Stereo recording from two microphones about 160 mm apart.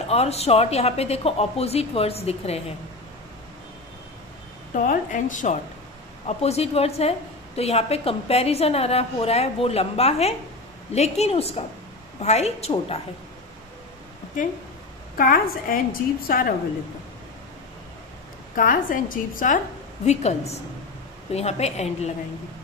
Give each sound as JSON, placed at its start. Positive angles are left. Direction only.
{"t": 0.1, "sound": "a woman's voice", "side_deg": 40}
{"t": 4.7, "sound": "a woman's voice", "side_deg": 55}
{"t": 6.2, "sound": "a woman's voice", "side_deg": 40}
{"t": 15.1, "sound": "a woman's voice", "side_deg": 60}
{"t": 18.6, "sound": "a woman's voice", "side_deg": 60}
{"t": 20.1, "sound": "a woman's voice", "side_deg": 45}